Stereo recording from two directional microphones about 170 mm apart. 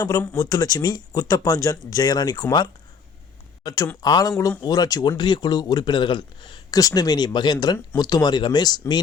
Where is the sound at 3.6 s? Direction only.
20° left (ahead or behind).